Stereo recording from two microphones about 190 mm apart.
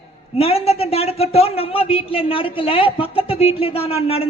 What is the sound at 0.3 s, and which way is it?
A woman's voice, 30° left (ahead or behind).